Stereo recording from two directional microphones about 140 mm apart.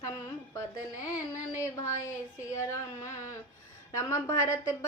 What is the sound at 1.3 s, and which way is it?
Speech, 20° left (ahead or behind).